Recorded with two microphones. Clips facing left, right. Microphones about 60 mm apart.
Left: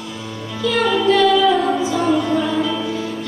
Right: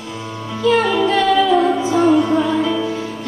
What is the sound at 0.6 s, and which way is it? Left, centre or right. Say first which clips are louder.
Music: right 3 dB; right.